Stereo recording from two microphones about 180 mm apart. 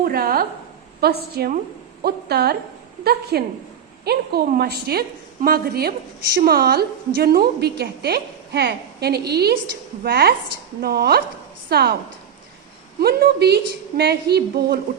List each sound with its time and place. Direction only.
0.0 s a woman's voice: 55° right (ahead or behind)
13.0 s a woman's voice: 60° right (ahead or behind)